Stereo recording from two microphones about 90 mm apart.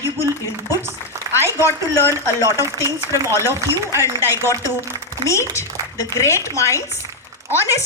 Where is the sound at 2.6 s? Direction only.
35° left (ahead or behind).